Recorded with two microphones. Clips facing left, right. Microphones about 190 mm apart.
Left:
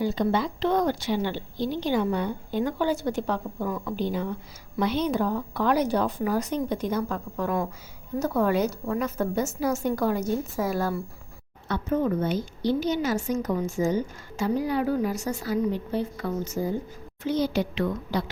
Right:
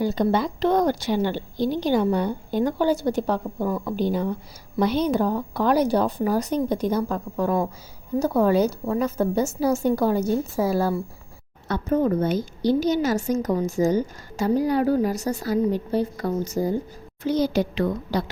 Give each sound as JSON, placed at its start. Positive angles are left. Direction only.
{"t": 0.0, "sound": "a woman's voice", "side_deg": -40}